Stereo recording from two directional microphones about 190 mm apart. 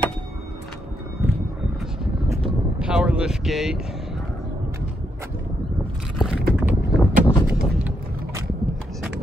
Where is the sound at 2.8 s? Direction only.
5° right (ahead or behind).